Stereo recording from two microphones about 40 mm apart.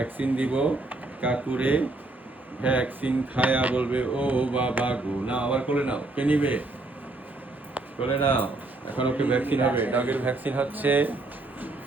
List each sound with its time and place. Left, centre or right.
0.2 s a man's voice: right
8.1 s speech: left
8.4 s a man's voice: right